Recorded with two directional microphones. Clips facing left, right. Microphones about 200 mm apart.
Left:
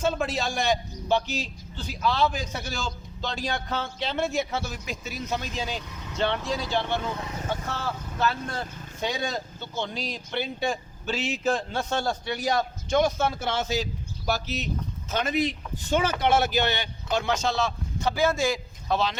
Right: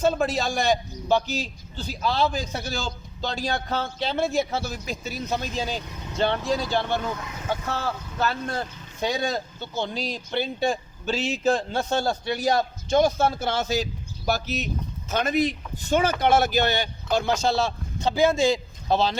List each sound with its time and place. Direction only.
0.0 s a man's voice: 40° right (ahead or behind)
7.2 s speech: 35° left (ahead or behind)
7.9 s a man's voice: 40° right (ahead or behind)